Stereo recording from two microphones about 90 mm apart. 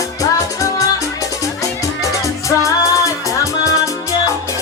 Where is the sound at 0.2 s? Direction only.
40° left (ahead or behind).